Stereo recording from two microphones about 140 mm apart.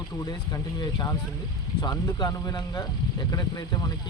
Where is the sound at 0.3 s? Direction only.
30° left (ahead or behind).